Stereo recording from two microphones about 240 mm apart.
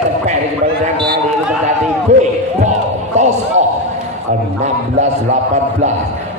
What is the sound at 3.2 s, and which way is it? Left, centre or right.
A man's voice, right.